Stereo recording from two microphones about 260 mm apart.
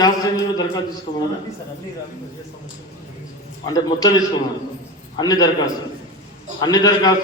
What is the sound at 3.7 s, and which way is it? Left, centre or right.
A man's voice, centre.